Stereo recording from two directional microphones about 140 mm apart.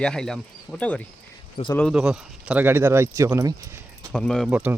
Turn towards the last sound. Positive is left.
turn(degrees=-10)  # may be behind; listen again after turning